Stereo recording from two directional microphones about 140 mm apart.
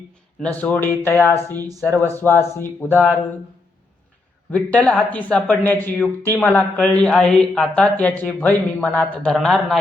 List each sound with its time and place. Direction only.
0.3 s speech: 10° left (ahead or behind)
4.5 s a man's voice: 10° left (ahead or behind)